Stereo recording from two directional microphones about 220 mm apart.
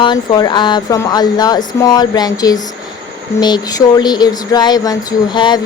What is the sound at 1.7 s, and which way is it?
Speech, 20° left (ahead or behind).